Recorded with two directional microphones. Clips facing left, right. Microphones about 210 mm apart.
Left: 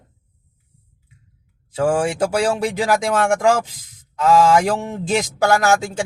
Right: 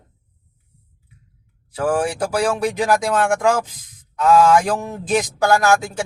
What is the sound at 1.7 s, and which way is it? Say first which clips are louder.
Speech: left 2 dB; 25° left (ahead or behind).